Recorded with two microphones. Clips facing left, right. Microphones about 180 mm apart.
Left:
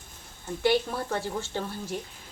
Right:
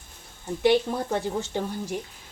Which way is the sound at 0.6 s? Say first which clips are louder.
Right 4 dB; 20° right (ahead or behind).